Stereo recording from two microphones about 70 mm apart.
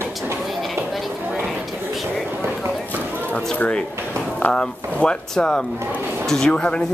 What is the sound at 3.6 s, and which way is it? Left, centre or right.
Speech, centre.